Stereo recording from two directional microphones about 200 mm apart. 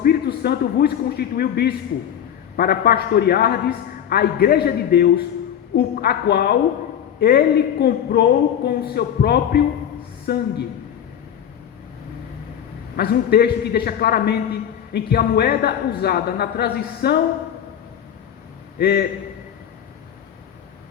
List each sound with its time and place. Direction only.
0.0 s a man's voice: 50° left (ahead or behind)
13.0 s speech: 50° left (ahead or behind)
18.8 s speech: 50° left (ahead or behind)